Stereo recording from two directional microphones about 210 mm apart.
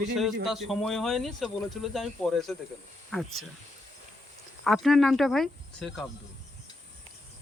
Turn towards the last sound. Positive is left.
turn(degrees=0)  # may be behind; listen again after turning